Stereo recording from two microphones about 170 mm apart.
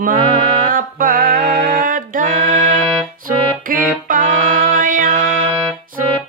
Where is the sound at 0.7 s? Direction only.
55° right (ahead or behind).